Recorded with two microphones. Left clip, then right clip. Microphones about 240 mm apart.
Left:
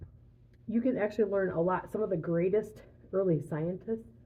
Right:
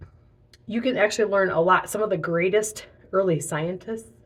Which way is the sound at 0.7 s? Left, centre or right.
Centre.